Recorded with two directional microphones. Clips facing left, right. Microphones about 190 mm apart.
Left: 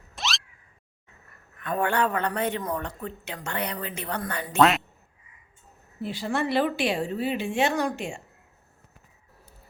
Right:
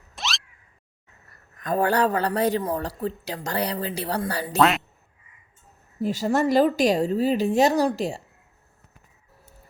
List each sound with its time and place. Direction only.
0.2 s a sound: centre (ahead or behind)
1.3 s a man's voice: 35° right (ahead or behind)
4.5 s speech: centre (ahead or behind)
6.0 s a man's voice: 40° right (ahead or behind)